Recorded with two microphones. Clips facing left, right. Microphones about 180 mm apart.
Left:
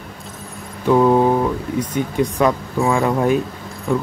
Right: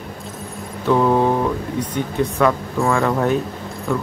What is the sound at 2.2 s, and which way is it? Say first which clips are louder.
Speech: even; 15° left (ahead or behind).